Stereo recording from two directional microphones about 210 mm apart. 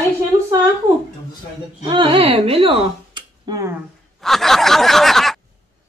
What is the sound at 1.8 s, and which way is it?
Speech, 25° right (ahead or behind).